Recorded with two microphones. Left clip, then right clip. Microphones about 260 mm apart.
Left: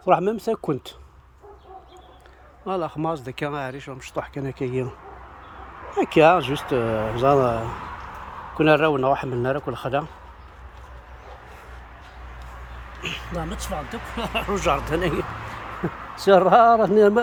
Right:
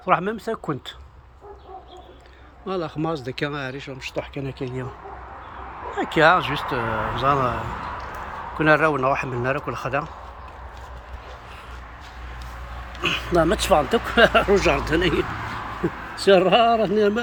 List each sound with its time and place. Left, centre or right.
0.0 s speech: left
2.6 s speech: centre
4.6 s speech: left
5.9 s speech: left
13.0 s a sound: centre
13.6 s speech: centre
16.2 s speech: left